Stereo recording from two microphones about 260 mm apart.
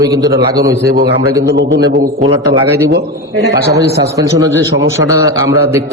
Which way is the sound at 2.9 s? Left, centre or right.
Right.